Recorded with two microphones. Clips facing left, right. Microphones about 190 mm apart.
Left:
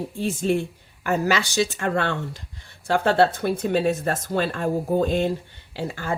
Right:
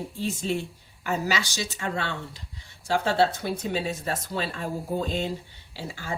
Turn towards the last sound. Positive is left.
turn(degrees=55)  # may be behind; listen again after turning